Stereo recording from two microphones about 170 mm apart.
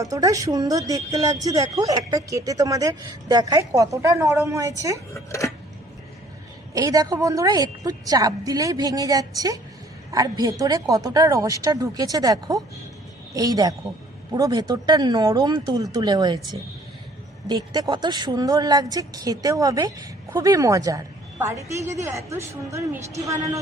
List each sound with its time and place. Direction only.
0.0 s a woman's voice: 20° right (ahead or behind)
5.1 s speech: 15° left (ahead or behind)
6.7 s a woman's voice: 20° right (ahead or behind)
17.7 s a woman's voice: 25° right (ahead or behind)